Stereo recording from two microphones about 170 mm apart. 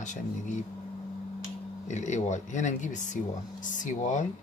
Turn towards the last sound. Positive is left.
turn(degrees=45)  # may be behind; listen again after turning